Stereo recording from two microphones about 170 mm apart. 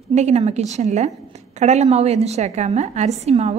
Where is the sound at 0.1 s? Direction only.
40° right (ahead or behind).